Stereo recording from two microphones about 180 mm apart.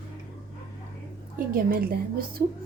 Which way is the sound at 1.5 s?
55° right (ahead or behind).